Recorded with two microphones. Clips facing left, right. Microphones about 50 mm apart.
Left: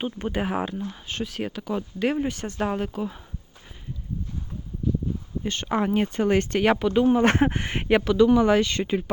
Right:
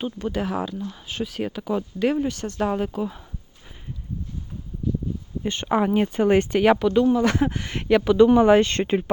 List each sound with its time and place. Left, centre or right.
0.0 s speech: left
1.0 s speech: centre
5.6 s speech: centre
6.2 s speech: centre
6.7 s speech: centre
7.1 s speech: left; by 8.0 s centre
8.2 s speech: right
8.6 s speech: right